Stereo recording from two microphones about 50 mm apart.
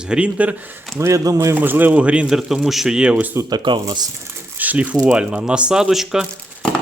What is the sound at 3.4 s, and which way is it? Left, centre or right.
Speech, right.